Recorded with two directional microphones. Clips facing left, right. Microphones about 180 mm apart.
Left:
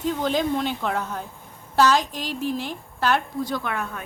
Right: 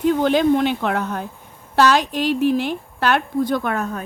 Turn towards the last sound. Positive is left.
turn(degrees=-40)  # may be behind; listen again after turning